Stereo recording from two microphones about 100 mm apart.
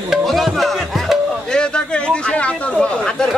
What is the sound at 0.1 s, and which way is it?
Music, centre (ahead or behind).